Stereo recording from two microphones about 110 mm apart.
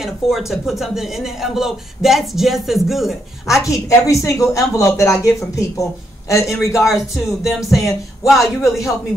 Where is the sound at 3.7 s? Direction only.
30° left (ahead or behind).